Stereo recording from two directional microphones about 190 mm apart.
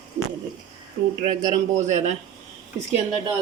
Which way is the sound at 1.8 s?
40° right (ahead or behind).